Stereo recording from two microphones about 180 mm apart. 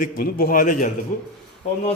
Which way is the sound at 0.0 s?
55° left (ahead or behind).